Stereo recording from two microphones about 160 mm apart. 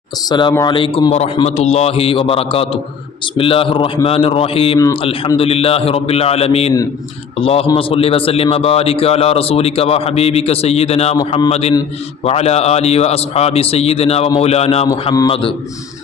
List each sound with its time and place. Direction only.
0.3 s a man's voice: 30° left (ahead or behind)